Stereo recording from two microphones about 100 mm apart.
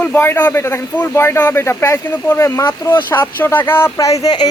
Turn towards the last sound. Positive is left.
turn(degrees=40)  # may be behind; listen again after turning